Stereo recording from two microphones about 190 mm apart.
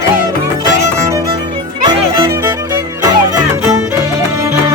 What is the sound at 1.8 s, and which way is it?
Music, 20° right (ahead or behind).